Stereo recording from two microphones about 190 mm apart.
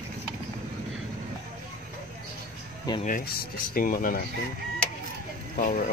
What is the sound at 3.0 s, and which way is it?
Speech, 45° left (ahead or behind).